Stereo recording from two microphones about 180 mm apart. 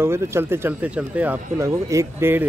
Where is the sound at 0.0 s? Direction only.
15° right (ahead or behind).